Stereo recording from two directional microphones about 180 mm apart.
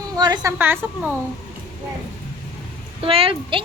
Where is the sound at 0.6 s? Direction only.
10° right (ahead or behind).